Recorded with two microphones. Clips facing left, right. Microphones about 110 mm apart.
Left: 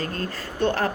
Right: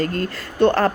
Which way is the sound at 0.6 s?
80° right.